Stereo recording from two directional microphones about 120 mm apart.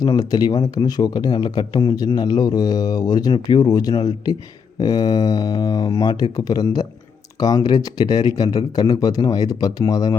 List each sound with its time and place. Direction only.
0.0 s speech: 30° left (ahead or behind)